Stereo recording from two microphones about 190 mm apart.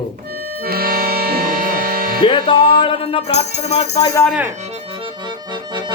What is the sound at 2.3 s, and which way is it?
Speech, 25° left (ahead or behind).